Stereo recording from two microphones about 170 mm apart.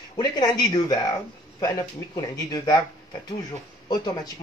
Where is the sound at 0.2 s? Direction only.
25° left (ahead or behind).